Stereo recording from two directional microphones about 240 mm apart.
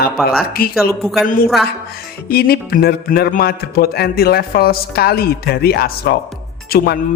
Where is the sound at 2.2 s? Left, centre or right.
Left.